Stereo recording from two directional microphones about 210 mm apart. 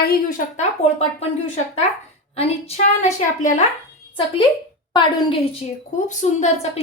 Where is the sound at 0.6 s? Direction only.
30° left (ahead or behind).